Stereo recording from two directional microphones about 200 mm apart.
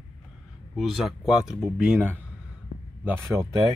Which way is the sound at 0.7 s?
Centre (ahead or behind).